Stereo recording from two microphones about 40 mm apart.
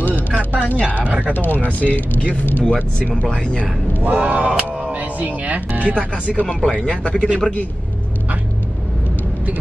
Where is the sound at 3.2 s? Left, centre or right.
Left.